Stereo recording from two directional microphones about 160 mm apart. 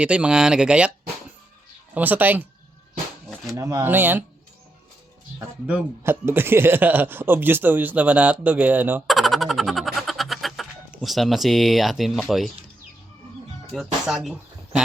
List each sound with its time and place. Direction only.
0.0 s speech: 5° right (ahead or behind)
2.0 s speech: 10° right (ahead or behind)
5.4 s speech: 15° right (ahead or behind)
9.0 s a sound: centre (ahead or behind)
13.7 s speech: centre (ahead or behind)